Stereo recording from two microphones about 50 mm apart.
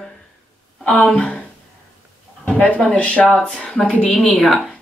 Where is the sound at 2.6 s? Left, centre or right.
Left.